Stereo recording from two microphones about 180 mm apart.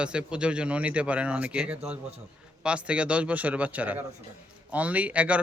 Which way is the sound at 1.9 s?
35° right (ahead or behind).